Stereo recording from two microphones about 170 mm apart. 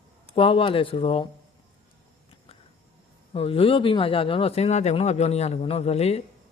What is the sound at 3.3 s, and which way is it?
Speech, 35° left (ahead or behind).